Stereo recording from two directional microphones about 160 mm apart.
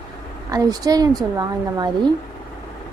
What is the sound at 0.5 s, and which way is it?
A woman's voice, 25° right (ahead or behind).